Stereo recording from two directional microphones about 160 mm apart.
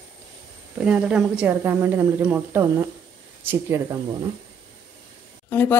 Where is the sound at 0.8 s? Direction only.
5° right (ahead or behind).